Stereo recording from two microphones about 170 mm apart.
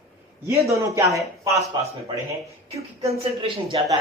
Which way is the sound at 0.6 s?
15° right (ahead or behind).